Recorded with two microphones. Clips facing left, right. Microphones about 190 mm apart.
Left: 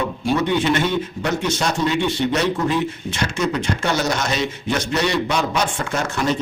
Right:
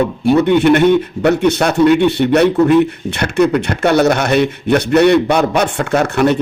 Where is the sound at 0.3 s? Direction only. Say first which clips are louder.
Right 9 dB; 60° right (ahead or behind).